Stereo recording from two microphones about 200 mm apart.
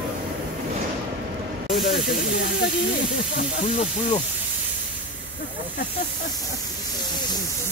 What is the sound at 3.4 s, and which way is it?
Speech, 35° left (ahead or behind).